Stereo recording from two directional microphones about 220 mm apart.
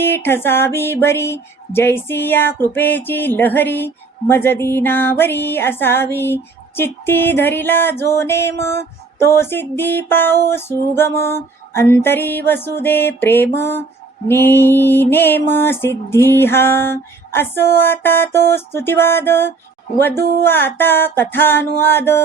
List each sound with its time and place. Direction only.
0.0 s speech: 10° left (ahead or behind)